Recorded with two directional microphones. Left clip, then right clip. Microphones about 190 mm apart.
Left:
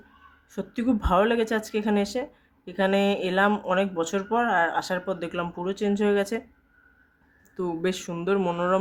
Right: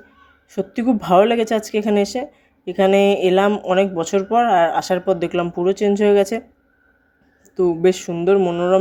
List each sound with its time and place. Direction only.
0.5 s speech: 20° right (ahead or behind)
7.5 s a woman's voice: 15° right (ahead or behind)